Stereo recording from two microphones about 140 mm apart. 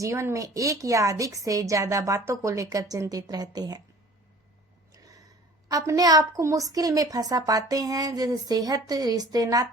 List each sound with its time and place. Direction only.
0.0 s a woman's voice: 20° right (ahead or behind)
5.7 s a woman's voice: 25° right (ahead or behind)